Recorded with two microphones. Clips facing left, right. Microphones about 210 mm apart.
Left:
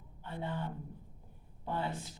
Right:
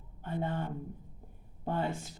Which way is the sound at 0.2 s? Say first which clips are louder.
Right 5 dB; 50° right (ahead or behind).